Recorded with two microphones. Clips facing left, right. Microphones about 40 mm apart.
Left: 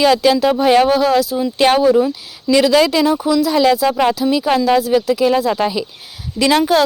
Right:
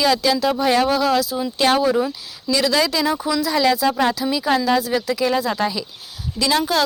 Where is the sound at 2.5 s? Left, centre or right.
Left.